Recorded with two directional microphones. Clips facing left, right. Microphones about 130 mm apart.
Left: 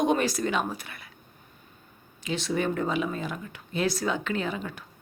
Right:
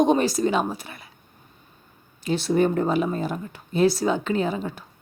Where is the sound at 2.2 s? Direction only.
40° right (ahead or behind).